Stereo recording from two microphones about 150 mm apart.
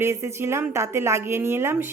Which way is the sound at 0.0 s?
20° right (ahead or behind).